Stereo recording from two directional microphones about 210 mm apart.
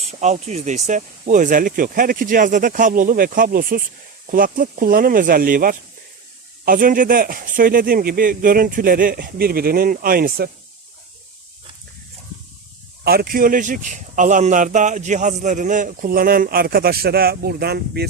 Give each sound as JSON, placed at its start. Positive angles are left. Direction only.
{"t": 0.0, "sound": "speech", "side_deg": -30}
{"t": 13.1, "sound": "speech", "side_deg": -45}